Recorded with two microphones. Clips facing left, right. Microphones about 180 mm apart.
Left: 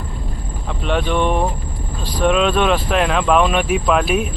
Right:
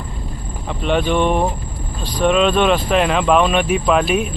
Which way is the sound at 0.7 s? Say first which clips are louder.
Right 2 dB; centre (ahead or behind).